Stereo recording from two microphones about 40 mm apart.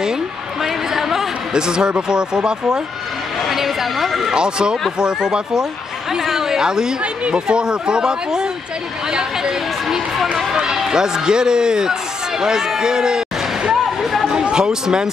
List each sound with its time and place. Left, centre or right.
1.5 s speech: centre
3.4 s speech: centre
4.4 s speech: right
6.2 s speech: centre
6.6 s a man's voice: centre
9.8 s a man's voice: centre
14.4 s speech: centre